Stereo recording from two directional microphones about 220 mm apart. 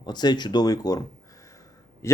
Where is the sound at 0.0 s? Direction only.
20° left (ahead or behind).